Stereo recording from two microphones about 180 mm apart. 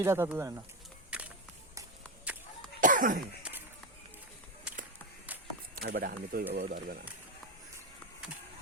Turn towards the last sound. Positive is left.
turn(degrees=-50)  # may be behind; listen again after turning